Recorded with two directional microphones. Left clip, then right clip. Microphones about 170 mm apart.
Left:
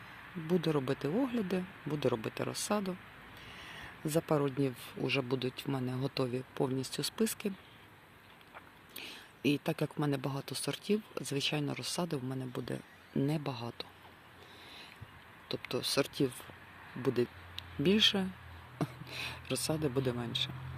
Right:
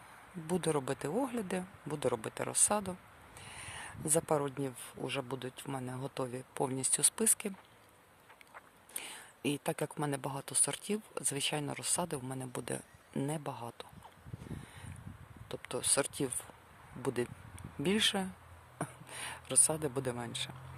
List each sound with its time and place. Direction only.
0.4 s speech: 20° right (ahead or behind)
4.1 s speech: 15° right (ahead or behind)
6.5 s speech: 20° right (ahead or behind)
9.4 s speech: 15° right (ahead or behind)
13.1 s speech: 10° right (ahead or behind)
15.4 s speech: 5° right (ahead or behind)